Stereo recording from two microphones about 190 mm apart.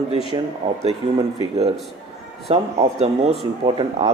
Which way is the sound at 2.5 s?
35° right (ahead or behind).